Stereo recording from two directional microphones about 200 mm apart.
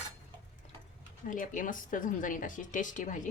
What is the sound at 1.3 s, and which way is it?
Speech, 40° left (ahead or behind).